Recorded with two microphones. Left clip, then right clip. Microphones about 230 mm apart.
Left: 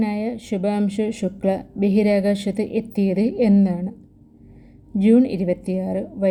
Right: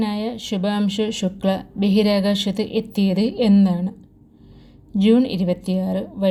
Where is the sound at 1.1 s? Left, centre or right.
Right.